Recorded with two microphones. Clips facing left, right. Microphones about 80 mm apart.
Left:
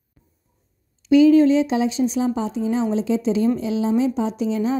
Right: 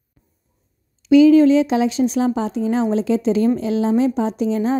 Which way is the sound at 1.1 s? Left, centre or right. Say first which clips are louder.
Right 2 dB; right.